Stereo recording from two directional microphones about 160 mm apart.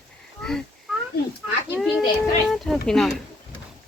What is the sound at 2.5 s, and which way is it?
Speech, centre (ahead or behind).